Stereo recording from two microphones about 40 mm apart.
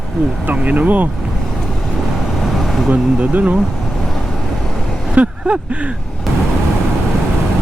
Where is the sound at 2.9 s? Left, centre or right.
Right.